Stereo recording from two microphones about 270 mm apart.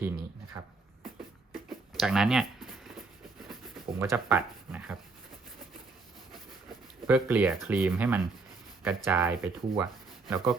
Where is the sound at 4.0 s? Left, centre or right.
Centre.